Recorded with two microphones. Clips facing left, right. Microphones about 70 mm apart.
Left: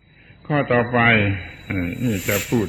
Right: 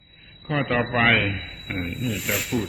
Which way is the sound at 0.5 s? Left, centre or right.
Centre.